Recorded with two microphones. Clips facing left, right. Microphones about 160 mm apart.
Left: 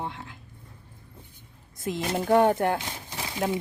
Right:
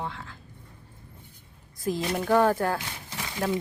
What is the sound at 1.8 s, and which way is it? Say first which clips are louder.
Speech: even; 25° left (ahead or behind).